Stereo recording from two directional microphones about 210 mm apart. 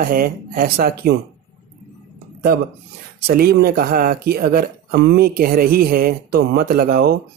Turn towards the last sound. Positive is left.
turn(degrees=-45)  # may be behind; listen again after turning